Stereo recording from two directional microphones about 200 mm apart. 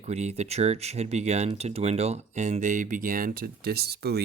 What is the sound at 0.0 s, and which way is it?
Speech, 35° right (ahead or behind).